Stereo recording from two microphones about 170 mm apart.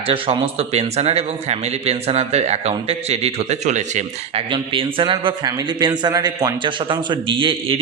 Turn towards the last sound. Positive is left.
turn(degrees=-30)  # may be behind; listen again after turning